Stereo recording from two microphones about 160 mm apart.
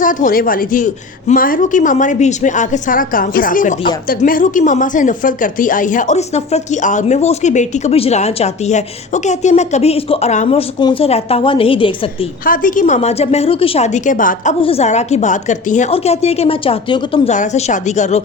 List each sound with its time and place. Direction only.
0.0 s a woman's voice: 55° left (ahead or behind)
10.8 s a woman's voice: 30° left (ahead or behind)
12.5 s a woman's voice: 60° left (ahead or behind)
12.8 s speech: 45° left (ahead or behind)
14.6 s speech: 40° left (ahead or behind)
15.9 s a woman's voice: 40° left (ahead or behind)
17.3 s speech: 50° left (ahead or behind)